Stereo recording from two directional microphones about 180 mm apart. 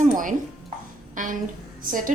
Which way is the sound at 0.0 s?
45° right (ahead or behind).